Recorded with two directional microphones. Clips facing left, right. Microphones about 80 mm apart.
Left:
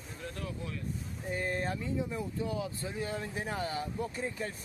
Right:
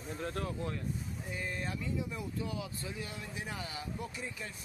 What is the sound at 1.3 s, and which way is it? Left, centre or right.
Speech, left.